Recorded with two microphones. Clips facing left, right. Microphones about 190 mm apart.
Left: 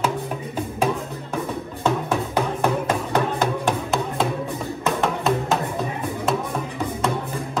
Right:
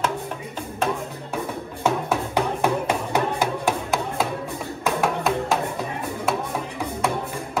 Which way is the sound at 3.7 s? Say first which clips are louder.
Left 1 dB; centre (ahead or behind).